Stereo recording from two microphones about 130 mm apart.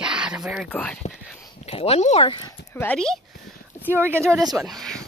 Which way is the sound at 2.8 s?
5° left (ahead or behind).